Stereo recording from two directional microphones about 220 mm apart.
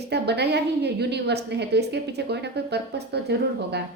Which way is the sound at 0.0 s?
50° right (ahead or behind).